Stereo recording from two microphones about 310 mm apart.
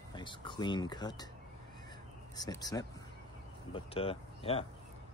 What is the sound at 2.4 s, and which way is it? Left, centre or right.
Speech, centre.